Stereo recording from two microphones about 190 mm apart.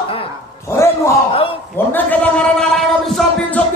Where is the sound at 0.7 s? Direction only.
15° left (ahead or behind).